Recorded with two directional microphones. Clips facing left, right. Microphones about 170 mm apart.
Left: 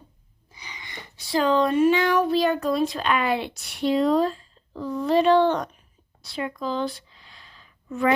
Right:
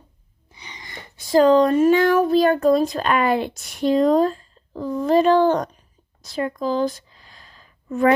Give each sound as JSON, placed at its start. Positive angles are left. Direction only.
{"t": 0.5, "sound": "gasp", "side_deg": -30}
{"t": 0.9, "sound": "speech", "side_deg": -45}
{"t": 6.2, "sound": "a sound", "side_deg": -45}